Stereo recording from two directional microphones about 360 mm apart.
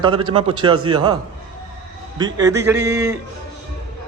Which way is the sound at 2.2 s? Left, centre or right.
Centre.